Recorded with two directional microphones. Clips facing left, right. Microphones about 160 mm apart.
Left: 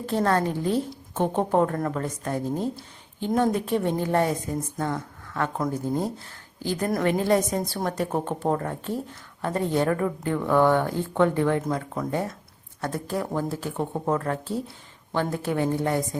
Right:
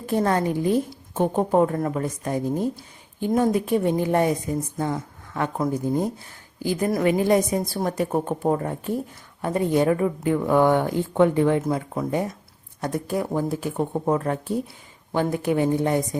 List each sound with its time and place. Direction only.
0.0 s a woman's voice: 15° right (ahead or behind)